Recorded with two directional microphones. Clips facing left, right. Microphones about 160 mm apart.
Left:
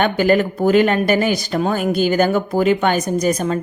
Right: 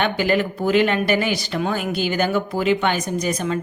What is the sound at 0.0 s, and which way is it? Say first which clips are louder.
Speech: left 4 dB; 45° left (ahead or behind).